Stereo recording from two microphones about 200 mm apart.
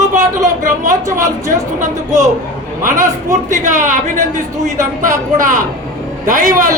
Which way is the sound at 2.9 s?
15° right (ahead or behind).